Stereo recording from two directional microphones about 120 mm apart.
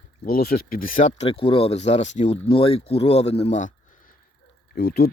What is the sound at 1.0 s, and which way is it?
Speech, 90° left.